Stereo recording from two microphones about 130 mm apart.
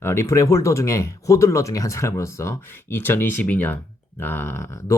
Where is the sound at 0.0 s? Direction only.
20° left (ahead or behind).